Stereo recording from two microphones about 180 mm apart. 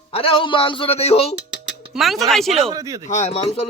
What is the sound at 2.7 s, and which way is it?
Speech, 20° right (ahead or behind).